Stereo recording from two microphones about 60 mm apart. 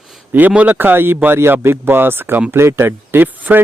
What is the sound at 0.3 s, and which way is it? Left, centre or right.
A man's voice, right.